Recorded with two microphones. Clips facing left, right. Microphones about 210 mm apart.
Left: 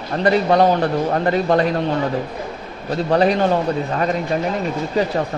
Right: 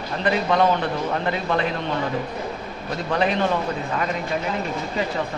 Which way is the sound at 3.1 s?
40° left (ahead or behind).